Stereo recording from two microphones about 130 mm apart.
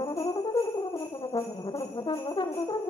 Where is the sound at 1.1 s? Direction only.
40° left (ahead or behind).